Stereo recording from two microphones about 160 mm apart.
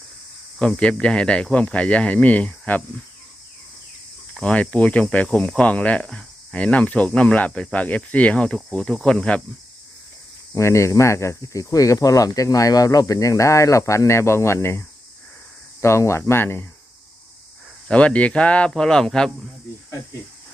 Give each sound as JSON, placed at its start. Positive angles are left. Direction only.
{"t": 0.6, "sound": "speech", "side_deg": 5}
{"t": 4.4, "sound": "speech", "side_deg": 5}
{"t": 10.5, "sound": "speech", "side_deg": 20}
{"t": 17.8, "sound": "speech", "side_deg": 5}